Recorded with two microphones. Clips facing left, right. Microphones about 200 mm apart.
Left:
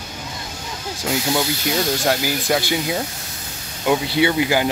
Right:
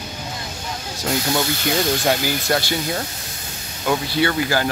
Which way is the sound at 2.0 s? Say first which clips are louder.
Even; 5° left (ahead or behind).